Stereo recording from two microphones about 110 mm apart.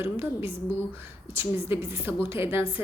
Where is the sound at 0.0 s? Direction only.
20° right (ahead or behind).